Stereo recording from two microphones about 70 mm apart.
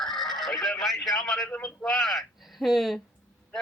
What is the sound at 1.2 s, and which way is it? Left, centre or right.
Speech, centre.